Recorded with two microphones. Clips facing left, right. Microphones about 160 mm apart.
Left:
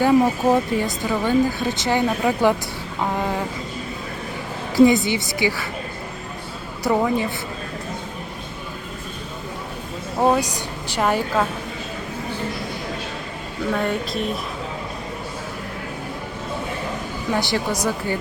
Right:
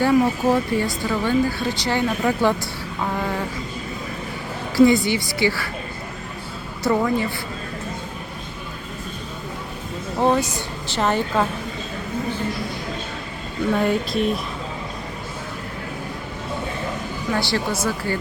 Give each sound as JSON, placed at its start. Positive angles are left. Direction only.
{"t": 0.0, "sound": "speech", "side_deg": 15}
{"t": 4.9, "sound": "speech", "side_deg": 20}
{"t": 6.8, "sound": "speech", "side_deg": 15}
{"t": 10.2, "sound": "a woman's voice", "side_deg": 10}
{"t": 13.7, "sound": "speech", "side_deg": 0}
{"t": 17.3, "sound": "speech", "side_deg": 15}